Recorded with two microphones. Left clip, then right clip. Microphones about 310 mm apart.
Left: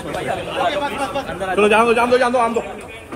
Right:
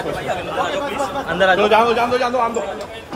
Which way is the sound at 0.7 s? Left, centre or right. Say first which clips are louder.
Left 1 dB; centre.